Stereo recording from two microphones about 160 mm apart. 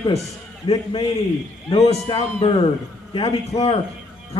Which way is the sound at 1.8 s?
35° left (ahead or behind).